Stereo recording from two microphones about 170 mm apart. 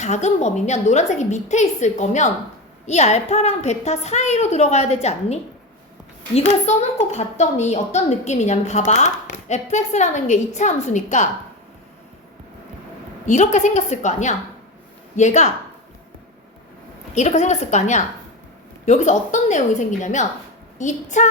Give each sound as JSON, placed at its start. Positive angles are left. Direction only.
{"t": 0.0, "sound": "a woman's voice", "side_deg": 45}
{"t": 13.2, "sound": "a woman's voice", "side_deg": 45}
{"t": 17.2, "sound": "a woman's voice", "side_deg": 45}